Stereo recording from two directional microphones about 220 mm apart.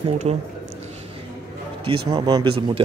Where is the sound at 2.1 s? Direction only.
20° right (ahead or behind).